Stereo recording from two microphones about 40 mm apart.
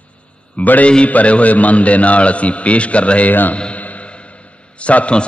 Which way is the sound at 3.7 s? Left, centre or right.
Left.